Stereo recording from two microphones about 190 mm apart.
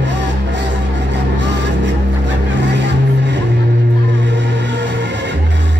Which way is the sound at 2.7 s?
65° right (ahead or behind).